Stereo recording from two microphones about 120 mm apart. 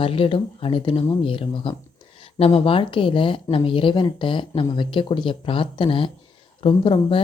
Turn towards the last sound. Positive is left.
turn(degrees=45)  # may be behind; listen again after turning